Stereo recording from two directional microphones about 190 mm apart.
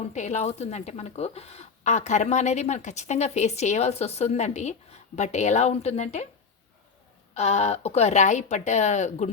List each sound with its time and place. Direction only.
0.1 s speech: 40° left (ahead or behind)
7.3 s speech: 35° left (ahead or behind)